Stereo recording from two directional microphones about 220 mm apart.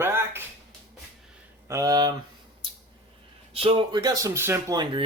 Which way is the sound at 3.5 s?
25° right (ahead or behind).